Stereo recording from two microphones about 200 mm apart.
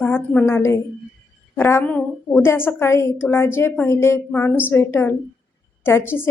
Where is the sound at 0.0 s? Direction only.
10° left (ahead or behind).